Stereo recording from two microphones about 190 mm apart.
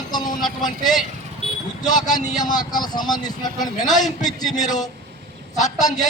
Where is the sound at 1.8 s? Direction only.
20° left (ahead or behind).